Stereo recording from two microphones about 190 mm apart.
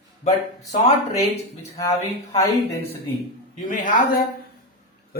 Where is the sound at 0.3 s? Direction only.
35° left (ahead or behind).